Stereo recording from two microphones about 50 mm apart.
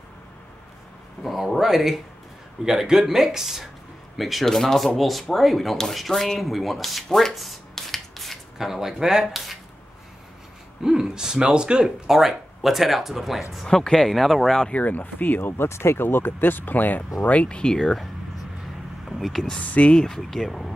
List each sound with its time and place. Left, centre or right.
1.2 s a sound: centre
1.6 s speech: centre
7.3 s finger snapping: centre
8.5 s speech: centre
10.8 s speech: centre
12.1 s speech: centre
13.7 s speech: centre
14.7 s speech: left
15.5 s speech: left; by 17.9 s centre
19.0 s speech: centre
19.6 s speech: left
19.9 s speech: centre